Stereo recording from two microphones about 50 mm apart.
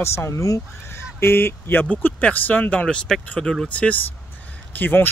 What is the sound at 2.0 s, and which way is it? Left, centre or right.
Speech, left.